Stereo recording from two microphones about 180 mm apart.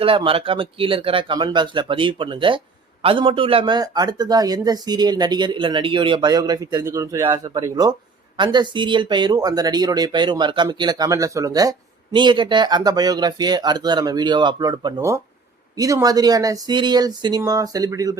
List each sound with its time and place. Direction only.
0.0 s speech: 30° right (ahead or behind)